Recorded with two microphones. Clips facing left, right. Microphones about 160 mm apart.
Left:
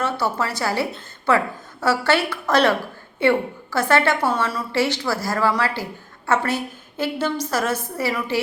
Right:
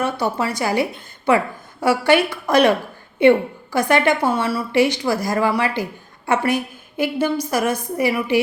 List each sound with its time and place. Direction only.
0.0 s a woman's voice: 15° right (ahead or behind)